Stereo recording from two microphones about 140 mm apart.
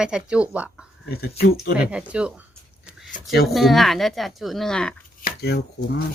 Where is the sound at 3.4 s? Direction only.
Centre (ahead or behind).